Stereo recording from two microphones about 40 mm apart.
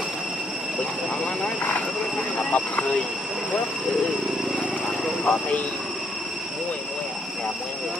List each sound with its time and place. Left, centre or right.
2.3 s speech: left
5.2 s speech: left